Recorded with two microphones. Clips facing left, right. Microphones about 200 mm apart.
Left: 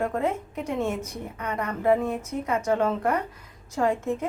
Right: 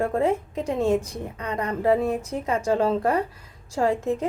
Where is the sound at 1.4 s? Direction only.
30° right (ahead or behind).